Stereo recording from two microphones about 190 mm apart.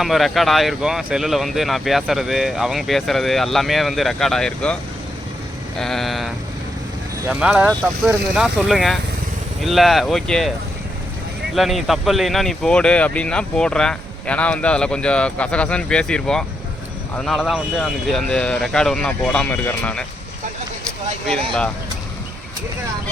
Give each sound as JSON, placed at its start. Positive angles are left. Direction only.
{"t": 0.0, "sound": "speech", "side_deg": 0}
{"t": 5.8, "sound": "speech", "side_deg": 0}
{"t": 11.5, "sound": "speech", "side_deg": 0}
{"t": 21.2, "sound": "speech", "side_deg": 5}